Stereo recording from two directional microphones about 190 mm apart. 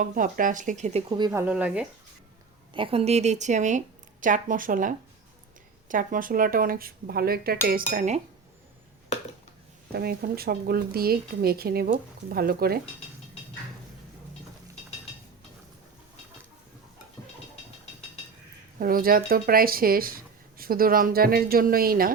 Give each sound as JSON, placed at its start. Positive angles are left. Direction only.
{"t": 0.0, "sound": "speech", "side_deg": -45}
{"t": 1.1, "sound": "speech", "side_deg": -20}
{"t": 2.7, "sound": "speech", "side_deg": -30}
{"t": 9.9, "sound": "speech", "side_deg": -55}
{"t": 18.8, "sound": "speech", "side_deg": -50}